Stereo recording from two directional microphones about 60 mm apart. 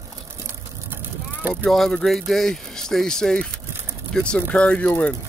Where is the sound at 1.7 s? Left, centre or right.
Centre; by 4.9 s left.